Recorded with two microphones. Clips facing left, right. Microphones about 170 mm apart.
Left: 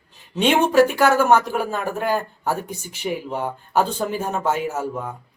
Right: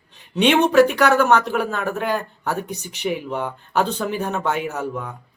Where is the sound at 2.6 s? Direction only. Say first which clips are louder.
Right 2 dB; 50° left (ahead or behind).